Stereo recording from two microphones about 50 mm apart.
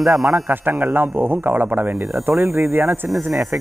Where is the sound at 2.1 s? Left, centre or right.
Right.